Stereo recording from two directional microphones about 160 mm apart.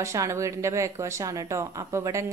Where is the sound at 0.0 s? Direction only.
20° right (ahead or behind).